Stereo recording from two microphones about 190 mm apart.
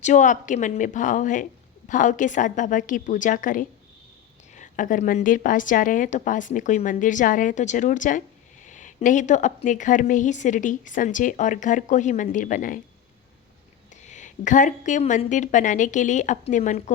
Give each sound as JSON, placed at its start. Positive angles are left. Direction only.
{"t": 0.0, "sound": "a woman's voice", "side_deg": 40}
{"t": 13.9, "sound": "a woman's voice", "side_deg": 40}